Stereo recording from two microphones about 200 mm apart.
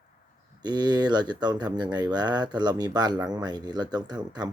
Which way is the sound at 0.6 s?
20° right (ahead or behind).